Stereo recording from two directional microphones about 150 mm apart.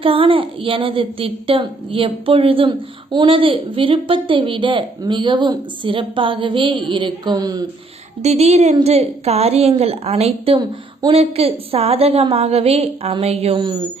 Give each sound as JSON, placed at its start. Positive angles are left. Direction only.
{"t": 0.0, "sound": "a woman's voice", "side_deg": -35}
{"t": 8.2, "sound": "a woman's voice", "side_deg": -45}